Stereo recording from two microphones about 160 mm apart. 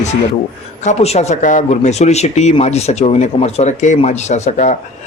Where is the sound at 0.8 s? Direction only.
40° left (ahead or behind).